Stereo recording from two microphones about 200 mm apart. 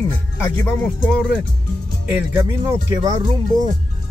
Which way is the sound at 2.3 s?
15° right (ahead or behind).